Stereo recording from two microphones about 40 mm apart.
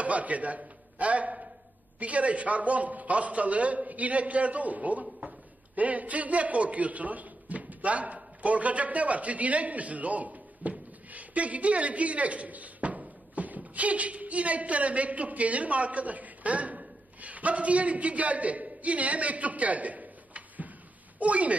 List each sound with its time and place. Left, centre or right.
0.0 s a man's voice: right
5.2 s a sound: right
5.8 s a man's voice: right